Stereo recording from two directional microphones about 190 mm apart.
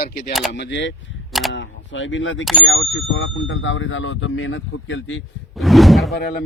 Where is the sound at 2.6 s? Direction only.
90° left.